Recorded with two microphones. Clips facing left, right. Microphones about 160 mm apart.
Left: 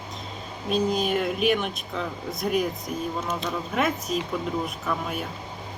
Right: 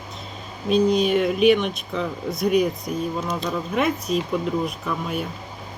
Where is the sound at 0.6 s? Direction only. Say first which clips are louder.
Right 6 dB; centre (ahead or behind).